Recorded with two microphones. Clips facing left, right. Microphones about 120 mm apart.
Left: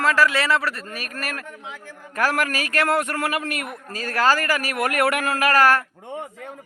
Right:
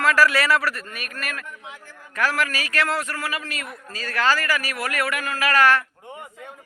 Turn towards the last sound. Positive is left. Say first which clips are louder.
# left 1 dB
turn(degrees=45)  # may be behind; listen again after turning